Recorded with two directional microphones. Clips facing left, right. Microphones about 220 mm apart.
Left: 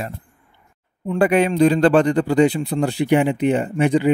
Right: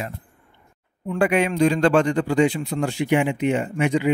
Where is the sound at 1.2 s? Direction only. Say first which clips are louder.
Left 4 dB; 35° left (ahead or behind).